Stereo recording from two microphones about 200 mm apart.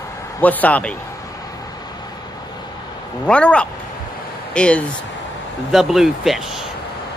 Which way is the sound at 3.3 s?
5° left (ahead or behind).